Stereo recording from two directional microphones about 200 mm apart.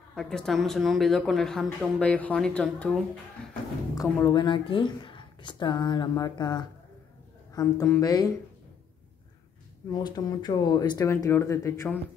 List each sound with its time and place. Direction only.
0.1 s speech: 5° left (ahead or behind)
3.9 s speech: 20° left (ahead or behind)
9.8 s speech: 20° left (ahead or behind)